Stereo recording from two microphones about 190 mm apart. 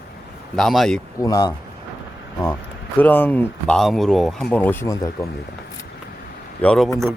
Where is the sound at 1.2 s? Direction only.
20° left (ahead or behind).